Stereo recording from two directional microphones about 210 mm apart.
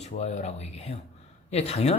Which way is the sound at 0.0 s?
30° left (ahead or behind).